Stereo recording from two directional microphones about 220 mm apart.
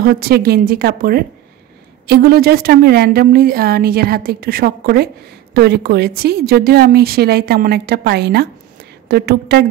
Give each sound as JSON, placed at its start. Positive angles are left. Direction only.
{"t": 0.0, "sound": "a woman's voice", "side_deg": -45}